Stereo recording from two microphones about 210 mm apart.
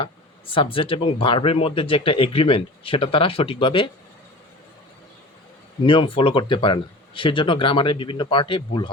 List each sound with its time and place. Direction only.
0.0 s speech: 25° left (ahead or behind)
5.8 s speech: 25° left (ahead or behind)